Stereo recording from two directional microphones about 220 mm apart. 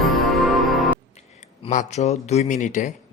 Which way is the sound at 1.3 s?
35° left (ahead or behind).